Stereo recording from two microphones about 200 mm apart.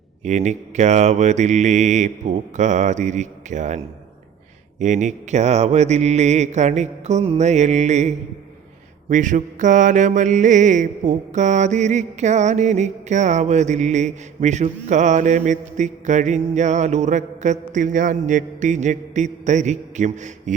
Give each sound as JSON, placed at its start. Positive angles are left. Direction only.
{"t": 0.3, "sound": "mantra", "side_deg": -35}
{"t": 4.8, "sound": "mantra", "side_deg": -35}